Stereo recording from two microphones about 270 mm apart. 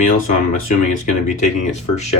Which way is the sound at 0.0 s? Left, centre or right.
Left.